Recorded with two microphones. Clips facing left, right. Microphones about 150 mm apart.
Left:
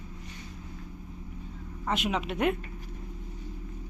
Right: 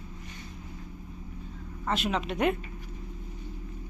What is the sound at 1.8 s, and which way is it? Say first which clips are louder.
Speech: even; 10° left (ahead or behind).